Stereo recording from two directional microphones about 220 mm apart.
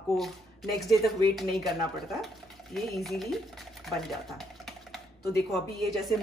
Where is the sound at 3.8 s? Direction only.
Centre (ahead or behind).